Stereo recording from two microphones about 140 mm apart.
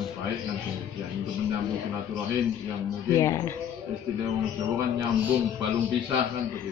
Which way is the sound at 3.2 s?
20° left (ahead or behind).